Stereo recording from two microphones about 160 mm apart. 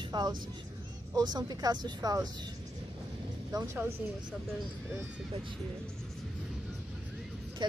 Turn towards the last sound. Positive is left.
turn(degrees=-30)  # may be behind; listen again after turning